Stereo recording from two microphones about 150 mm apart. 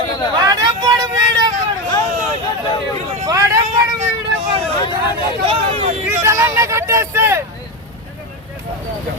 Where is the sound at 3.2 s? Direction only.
20° right (ahead or behind).